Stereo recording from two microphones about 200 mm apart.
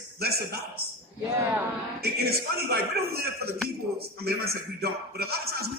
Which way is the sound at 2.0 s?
50° right (ahead or behind).